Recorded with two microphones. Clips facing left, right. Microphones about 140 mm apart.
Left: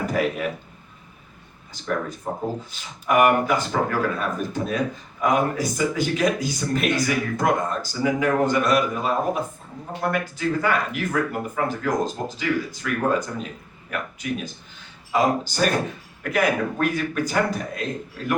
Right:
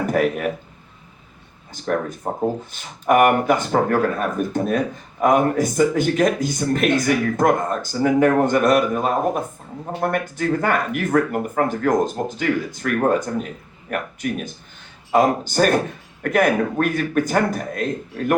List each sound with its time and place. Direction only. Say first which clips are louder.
0.0 s a man's voice: right 4 dB; 55° right (ahead or behind)
1.7 s a man's voice: right 4 dB; 50° right (ahead or behind)